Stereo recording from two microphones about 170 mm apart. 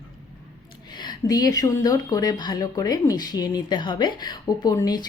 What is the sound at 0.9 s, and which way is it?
Speech, 25° left (ahead or behind).